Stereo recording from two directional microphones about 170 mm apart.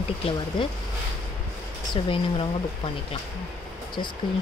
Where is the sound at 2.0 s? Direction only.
35° left (ahead or behind).